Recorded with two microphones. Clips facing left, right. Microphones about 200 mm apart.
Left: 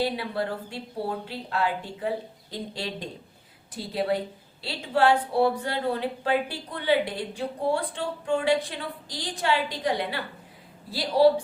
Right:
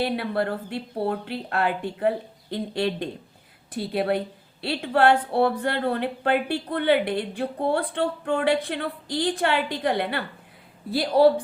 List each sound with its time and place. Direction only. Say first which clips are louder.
0.0 s speech: right 3 dB; 60° right (ahead or behind)